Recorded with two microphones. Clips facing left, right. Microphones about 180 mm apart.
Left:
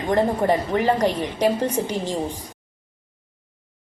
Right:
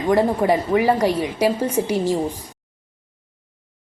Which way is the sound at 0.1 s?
10° right (ahead or behind).